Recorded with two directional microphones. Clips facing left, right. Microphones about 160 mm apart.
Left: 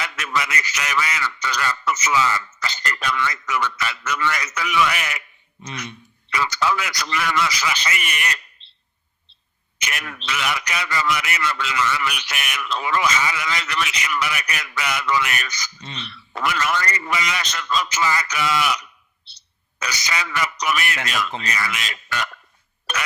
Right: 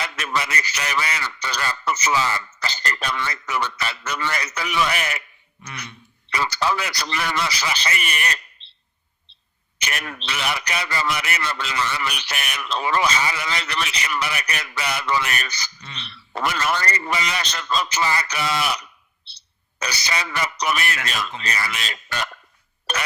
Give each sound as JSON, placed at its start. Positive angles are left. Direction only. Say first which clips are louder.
{"t": 0.0, "sound": "a man's voice", "louder": "even", "side_deg": -30}
{"t": 5.6, "sound": "speech", "louder": "left 4 dB", "side_deg": 20}
{"t": 6.3, "sound": "a man's voice", "louder": "left 1 dB", "side_deg": -30}
{"t": 9.7, "sound": "a man's voice", "louder": "right 1 dB", "side_deg": -35}
{"t": 22.9, "sound": "a sound", "louder": "right 1 dB", "side_deg": -30}